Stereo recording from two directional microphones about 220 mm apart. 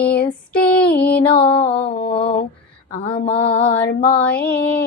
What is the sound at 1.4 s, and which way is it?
Mantra, 25° left (ahead or behind).